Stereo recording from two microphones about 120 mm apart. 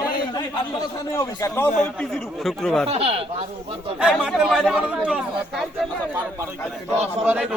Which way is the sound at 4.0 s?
5° right (ahead or behind).